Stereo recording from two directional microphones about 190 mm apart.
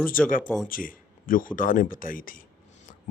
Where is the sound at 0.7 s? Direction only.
45° left (ahead or behind).